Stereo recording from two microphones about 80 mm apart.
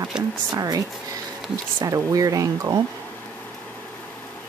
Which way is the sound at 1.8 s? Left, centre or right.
Right.